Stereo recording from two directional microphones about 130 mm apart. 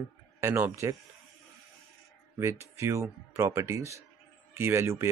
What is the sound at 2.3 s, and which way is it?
Speech, 20° right (ahead or behind).